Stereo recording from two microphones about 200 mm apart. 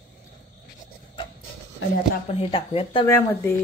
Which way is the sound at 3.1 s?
15° left (ahead or behind).